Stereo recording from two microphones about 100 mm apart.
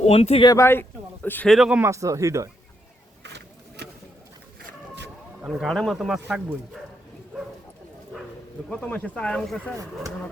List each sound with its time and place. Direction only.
0.0 s speech: 90° left
0.6 s a man's voice: 20° left (ahead or behind)
1.5 s speech: 5° right (ahead or behind)
1.8 s speech: 30° right (ahead or behind)
5.5 s speech: centre (ahead or behind)
6.1 s speech: 10° right (ahead or behind)
8.7 s speech: 15° left (ahead or behind)